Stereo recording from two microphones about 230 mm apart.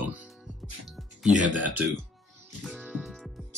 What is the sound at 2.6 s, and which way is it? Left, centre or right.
Music, centre.